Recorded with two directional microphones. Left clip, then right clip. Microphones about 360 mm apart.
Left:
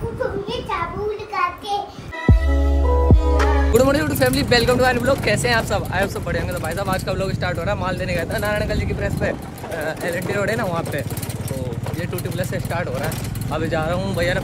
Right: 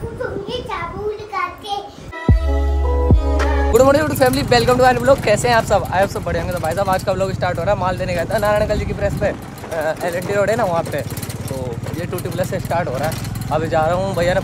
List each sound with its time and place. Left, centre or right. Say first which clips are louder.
3.1 s speech: even; centre
10.6 s speech: right 6 dB; right
12.4 s speech: right 6 dB; centre